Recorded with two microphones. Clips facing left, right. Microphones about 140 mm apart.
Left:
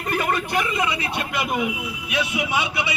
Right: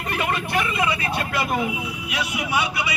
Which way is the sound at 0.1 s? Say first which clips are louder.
Left 2 dB; 40° left (ahead or behind).